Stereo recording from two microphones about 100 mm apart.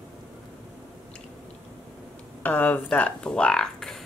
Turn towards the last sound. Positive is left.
turn(degrees=5)  # may be behind; listen again after turning